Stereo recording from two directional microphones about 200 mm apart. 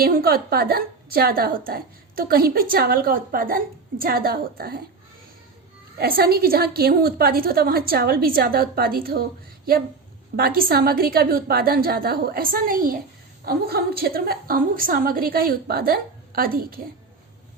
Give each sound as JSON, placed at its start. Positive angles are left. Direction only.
{"t": 0.0, "sound": "a woman's voice", "side_deg": -50}
{"t": 6.0, "sound": "a woman's voice", "side_deg": -50}
{"t": 10.3, "sound": "a woman's voice", "side_deg": -50}